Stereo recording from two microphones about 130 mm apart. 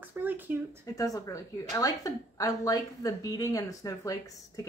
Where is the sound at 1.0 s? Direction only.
25° left (ahead or behind).